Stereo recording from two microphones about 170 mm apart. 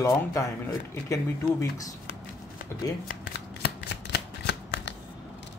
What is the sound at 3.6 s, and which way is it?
Shuffling cards, 80° left.